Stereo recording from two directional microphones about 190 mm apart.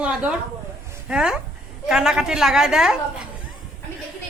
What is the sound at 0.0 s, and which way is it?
A woman's voice, 5° right (ahead or behind).